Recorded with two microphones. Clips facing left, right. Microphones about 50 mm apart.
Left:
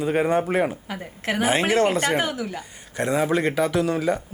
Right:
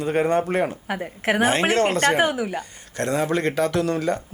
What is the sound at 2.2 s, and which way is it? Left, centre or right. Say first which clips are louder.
Speech: right 5 dB; right.